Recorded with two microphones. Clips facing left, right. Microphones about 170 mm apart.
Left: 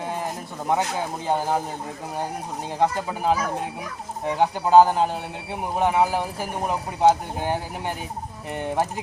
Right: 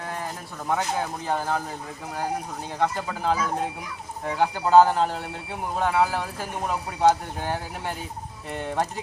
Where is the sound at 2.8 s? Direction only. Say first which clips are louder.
Left 3 dB; 15° left (ahead or behind).